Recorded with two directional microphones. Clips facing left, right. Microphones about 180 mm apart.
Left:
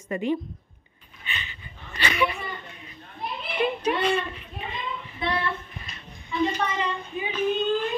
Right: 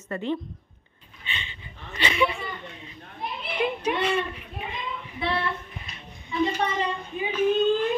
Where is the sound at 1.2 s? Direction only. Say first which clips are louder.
Even; 25° right (ahead or behind).